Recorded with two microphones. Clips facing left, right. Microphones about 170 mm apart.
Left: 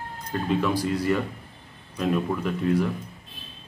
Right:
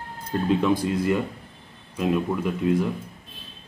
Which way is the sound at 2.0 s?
15° right (ahead or behind).